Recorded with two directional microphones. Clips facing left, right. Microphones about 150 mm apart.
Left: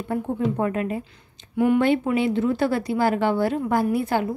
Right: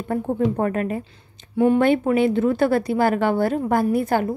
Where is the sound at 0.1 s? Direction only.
50° right (ahead or behind).